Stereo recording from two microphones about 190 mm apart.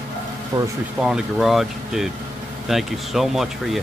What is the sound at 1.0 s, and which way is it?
Speech, 5° right (ahead or behind).